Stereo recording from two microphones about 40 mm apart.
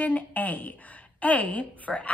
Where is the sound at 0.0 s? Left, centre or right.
Left.